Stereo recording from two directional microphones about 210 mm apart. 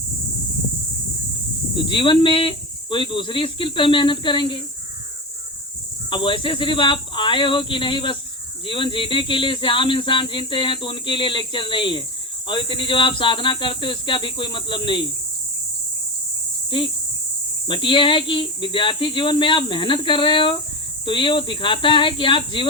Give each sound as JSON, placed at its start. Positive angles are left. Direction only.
{"t": 1.7, "sound": "speech", "side_deg": 25}
{"t": 6.1, "sound": "speech", "side_deg": 25}
{"t": 16.6, "sound": "speech", "side_deg": 25}